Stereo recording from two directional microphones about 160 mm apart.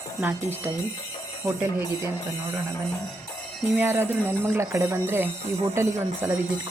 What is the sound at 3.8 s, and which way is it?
A woman's voice, 15° right (ahead or behind).